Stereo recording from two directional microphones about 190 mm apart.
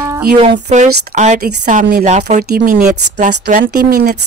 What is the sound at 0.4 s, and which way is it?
A woman's voice, 35° right (ahead or behind).